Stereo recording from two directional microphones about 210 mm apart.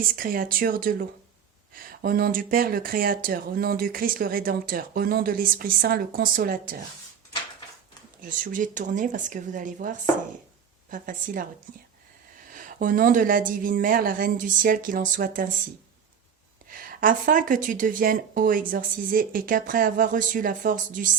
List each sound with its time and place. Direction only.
0.0 s speech: 45° right (ahead or behind)
8.2 s speech: 40° right (ahead or behind)
12.5 s speech: 40° right (ahead or behind)
16.7 s speech: 40° right (ahead or behind)